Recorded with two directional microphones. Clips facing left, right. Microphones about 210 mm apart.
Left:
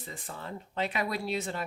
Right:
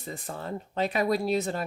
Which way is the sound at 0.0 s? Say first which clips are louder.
Right 5 dB; 40° right (ahead or behind).